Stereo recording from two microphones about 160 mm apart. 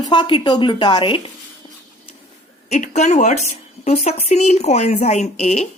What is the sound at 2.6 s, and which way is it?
Speech, 45° left (ahead or behind).